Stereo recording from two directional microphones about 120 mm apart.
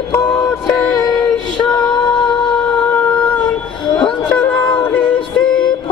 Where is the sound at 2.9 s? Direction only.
10° left (ahead or behind).